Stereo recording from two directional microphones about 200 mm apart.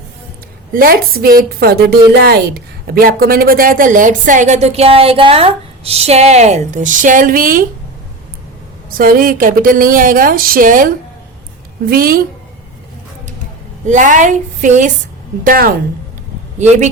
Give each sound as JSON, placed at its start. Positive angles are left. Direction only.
{"t": 0.7, "sound": "a woman's voice", "side_deg": -45}
{"t": 9.0, "sound": "speech", "side_deg": -45}
{"t": 13.8, "sound": "a woman's voice", "side_deg": -40}
{"t": 16.6, "sound": "a woman's voice", "side_deg": -35}